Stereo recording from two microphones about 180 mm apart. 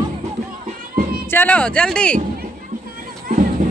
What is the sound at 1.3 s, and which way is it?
Speech, 10° left (ahead or behind).